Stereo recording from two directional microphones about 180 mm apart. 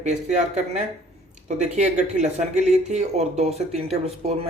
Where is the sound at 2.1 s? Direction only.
40° right (ahead or behind).